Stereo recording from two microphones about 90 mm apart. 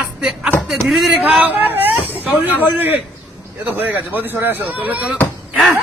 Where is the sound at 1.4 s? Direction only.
20° right (ahead or behind).